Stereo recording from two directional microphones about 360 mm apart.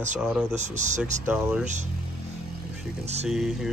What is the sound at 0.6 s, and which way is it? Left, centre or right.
Speech, centre.